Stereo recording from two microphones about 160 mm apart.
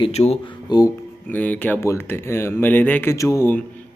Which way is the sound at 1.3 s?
10° left (ahead or behind).